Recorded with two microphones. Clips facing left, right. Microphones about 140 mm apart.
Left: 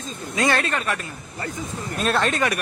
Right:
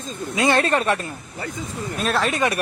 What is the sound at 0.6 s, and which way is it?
Speech, 35° right (ahead or behind).